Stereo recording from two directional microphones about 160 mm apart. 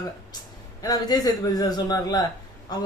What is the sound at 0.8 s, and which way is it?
Speech, 25° left (ahead or behind).